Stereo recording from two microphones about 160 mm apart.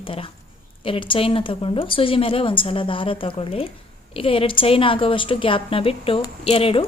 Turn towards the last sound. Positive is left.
turn(degrees=35)  # may be behind; listen again after turning